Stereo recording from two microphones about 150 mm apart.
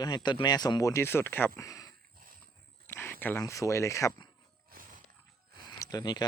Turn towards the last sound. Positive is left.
turn(degrees=25)  # may be behind; listen again after turning